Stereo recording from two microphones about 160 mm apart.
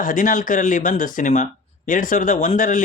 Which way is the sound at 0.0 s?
55° left (ahead or behind).